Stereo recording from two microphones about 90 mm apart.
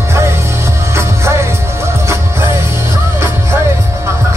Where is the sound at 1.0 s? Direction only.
30° right (ahead or behind).